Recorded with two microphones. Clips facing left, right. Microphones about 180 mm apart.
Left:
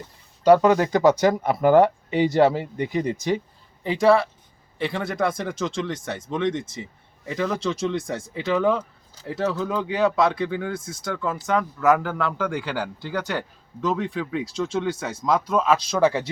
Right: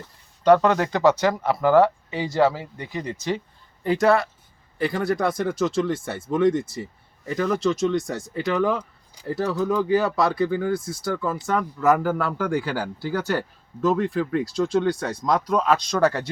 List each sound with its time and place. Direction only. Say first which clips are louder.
0.4 s speech: left 1 dB; 10° left (ahead or behind)
3.8 s a man's voice: left 1 dB; centre (ahead or behind)